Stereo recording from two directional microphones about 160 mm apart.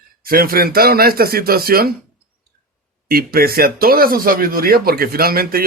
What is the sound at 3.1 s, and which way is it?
Speech, 70° right (ahead or behind).